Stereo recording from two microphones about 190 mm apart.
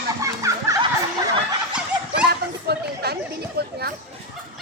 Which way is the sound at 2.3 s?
55° right (ahead or behind).